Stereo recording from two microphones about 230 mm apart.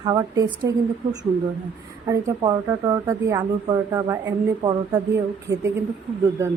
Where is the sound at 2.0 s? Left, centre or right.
Centre.